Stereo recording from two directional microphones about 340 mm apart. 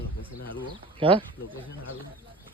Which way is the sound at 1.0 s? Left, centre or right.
Centre.